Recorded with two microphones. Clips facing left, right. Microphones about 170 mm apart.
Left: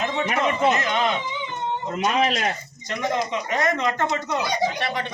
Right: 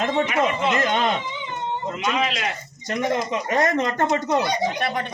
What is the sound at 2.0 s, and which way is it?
Speech, 45° left (ahead or behind).